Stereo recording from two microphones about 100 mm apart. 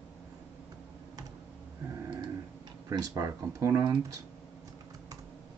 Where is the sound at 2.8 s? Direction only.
35° right (ahead or behind).